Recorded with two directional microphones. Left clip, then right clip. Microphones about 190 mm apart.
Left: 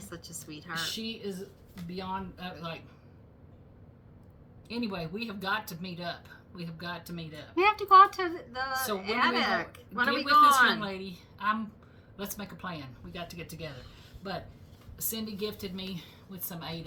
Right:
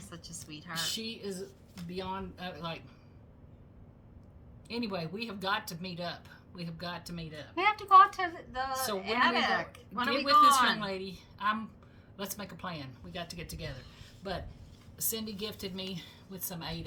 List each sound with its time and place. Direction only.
0.1 s a sound: 15° left (ahead or behind)
0.9 s speech: 35° right (ahead or behind)
4.7 s speech: 25° right (ahead or behind)
7.5 s a woman's voice: 10° left (ahead or behind)
10.8 s speech: 25° right (ahead or behind)